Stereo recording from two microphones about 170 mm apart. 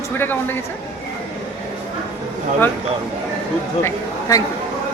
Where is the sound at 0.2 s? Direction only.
10° left (ahead or behind).